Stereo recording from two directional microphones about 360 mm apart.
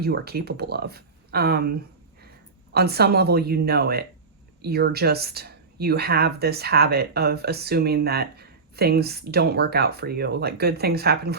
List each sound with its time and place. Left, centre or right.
0.0 s speech: right
2.7 s speech: right